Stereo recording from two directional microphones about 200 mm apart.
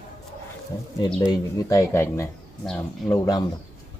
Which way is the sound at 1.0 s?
20° left (ahead or behind).